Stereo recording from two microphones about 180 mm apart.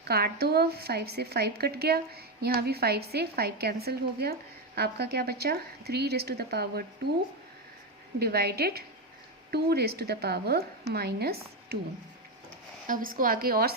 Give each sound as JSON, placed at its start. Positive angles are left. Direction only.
{"t": 0.0, "sound": "speech", "side_deg": -60}
{"t": 8.2, "sound": "speech", "side_deg": -60}
{"t": 12.9, "sound": "a woman's voice", "side_deg": -50}